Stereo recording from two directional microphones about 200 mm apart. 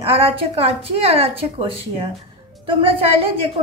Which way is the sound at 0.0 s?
30° right (ahead or behind).